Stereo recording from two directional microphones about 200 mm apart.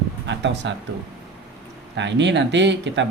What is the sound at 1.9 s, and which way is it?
Speech, 60° right (ahead or behind).